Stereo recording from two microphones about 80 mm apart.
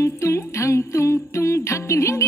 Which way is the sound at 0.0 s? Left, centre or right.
Left.